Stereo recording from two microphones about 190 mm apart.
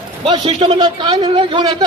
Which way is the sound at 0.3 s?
25° right (ahead or behind).